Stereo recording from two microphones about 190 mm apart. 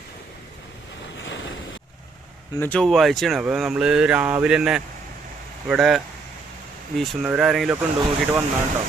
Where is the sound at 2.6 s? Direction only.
5° left (ahead or behind).